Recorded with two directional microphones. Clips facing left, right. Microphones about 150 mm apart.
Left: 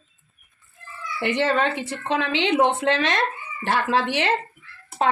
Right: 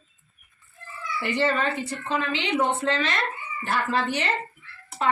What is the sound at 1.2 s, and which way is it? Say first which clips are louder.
A woman's voice: left 3 dB; 75° left (ahead or behind).